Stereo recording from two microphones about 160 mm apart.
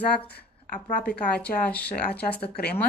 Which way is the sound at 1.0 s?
5° left (ahead or behind).